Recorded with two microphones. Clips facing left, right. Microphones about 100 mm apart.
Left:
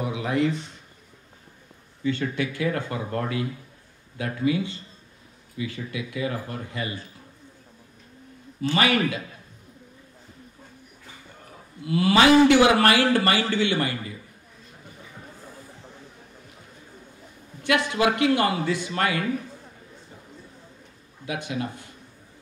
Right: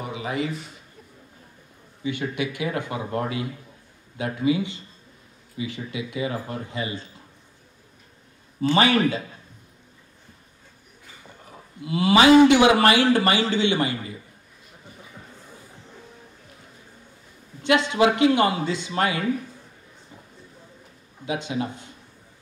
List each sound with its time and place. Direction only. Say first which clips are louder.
0.0 s speech: left 4 dB; centre (ahead or behind)
2.0 s a man's voice: left 1 dB; 15° right (ahead or behind)
8.5 s a man's voice: right 3 dB; 30° right (ahead or behind)
11.8 s a man's voice: right 1 dB; 20° right (ahead or behind)
17.6 s a man's voice: right 3 dB; 20° right (ahead or behind)
21.3 s a man's voice: right 2 dB; 20° right (ahead or behind)